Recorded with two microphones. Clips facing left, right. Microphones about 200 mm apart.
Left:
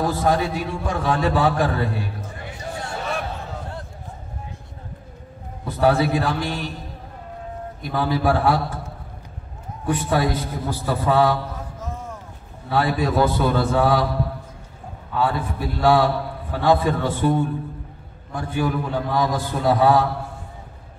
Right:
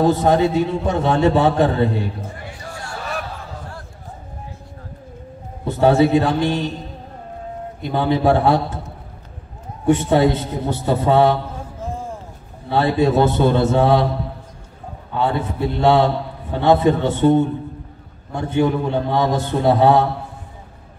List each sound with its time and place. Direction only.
0.0 s a man's voice: 25° right (ahead or behind)
2.6 s a sound: 20° left (ahead or behind)
5.7 s a man's voice: 25° right (ahead or behind)
7.8 s a man's voice: 25° right (ahead or behind)
9.8 s a man's voice: 25° right (ahead or behind)
15.1 s a man's voice: 25° right (ahead or behind)